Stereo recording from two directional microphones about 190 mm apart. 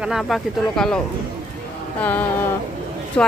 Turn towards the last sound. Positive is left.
turn(degrees=5)  # may be behind; listen again after turning